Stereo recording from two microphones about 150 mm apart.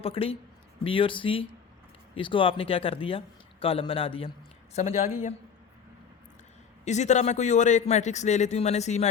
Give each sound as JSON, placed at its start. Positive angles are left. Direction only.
{"t": 0.0, "sound": "speech", "side_deg": 40}
{"t": 6.8, "sound": "a man's voice", "side_deg": 50}